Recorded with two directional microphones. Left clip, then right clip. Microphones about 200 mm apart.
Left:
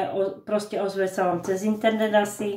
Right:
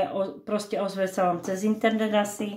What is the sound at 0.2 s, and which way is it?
Speech, 40° right (ahead or behind).